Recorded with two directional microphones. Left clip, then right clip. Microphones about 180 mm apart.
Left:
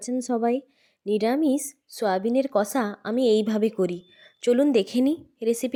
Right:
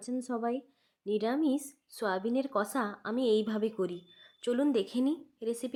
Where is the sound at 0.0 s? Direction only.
30° left (ahead or behind).